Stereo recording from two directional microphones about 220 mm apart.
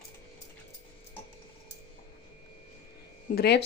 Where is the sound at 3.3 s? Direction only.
45° left (ahead or behind).